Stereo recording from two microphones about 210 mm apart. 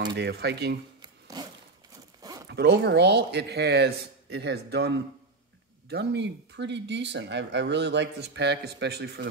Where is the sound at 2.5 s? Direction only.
55° right (ahead or behind).